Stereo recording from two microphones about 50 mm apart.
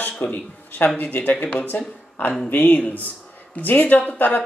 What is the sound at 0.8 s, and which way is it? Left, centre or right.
Speech, left.